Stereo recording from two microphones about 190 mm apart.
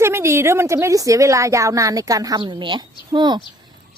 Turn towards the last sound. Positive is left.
turn(degrees=-20)  # may be behind; listen again after turning